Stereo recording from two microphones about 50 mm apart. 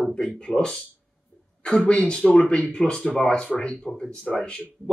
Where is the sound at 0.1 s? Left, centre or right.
Centre.